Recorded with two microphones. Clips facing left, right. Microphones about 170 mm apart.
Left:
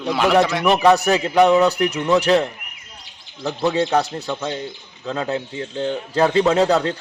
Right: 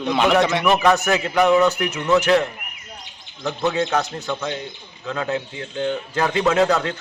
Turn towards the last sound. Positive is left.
turn(degrees=35)  # may be behind; listen again after turning